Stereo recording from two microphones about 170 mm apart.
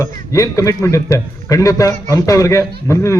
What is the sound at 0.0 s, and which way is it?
A man's voice, 20° left (ahead or behind).